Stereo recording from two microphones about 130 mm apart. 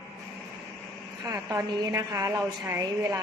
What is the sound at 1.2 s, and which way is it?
A woman's voice, 25° right (ahead or behind).